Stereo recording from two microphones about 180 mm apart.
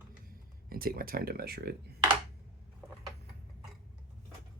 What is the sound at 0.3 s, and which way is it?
Speech, 55° right (ahead or behind).